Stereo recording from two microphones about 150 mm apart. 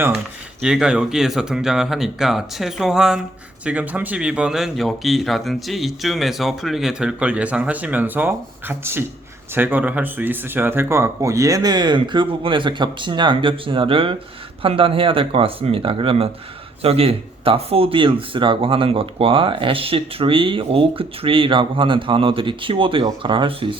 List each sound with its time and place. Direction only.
0.6 s speech: 5° right (ahead or behind); by 23.6 s 35° right (ahead or behind)